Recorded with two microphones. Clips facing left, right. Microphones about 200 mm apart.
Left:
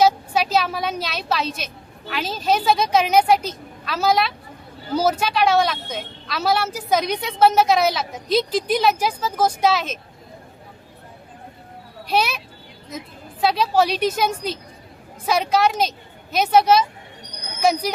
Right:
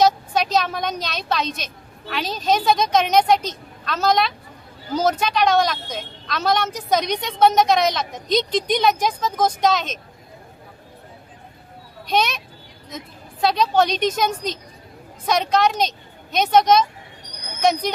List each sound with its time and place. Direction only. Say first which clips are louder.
0.0 s a woman's voice: even; 5° left (ahead or behind)
12.0 s speech: even; 5° left (ahead or behind)
13.4 s a woman's voice: even; 5° left (ahead or behind)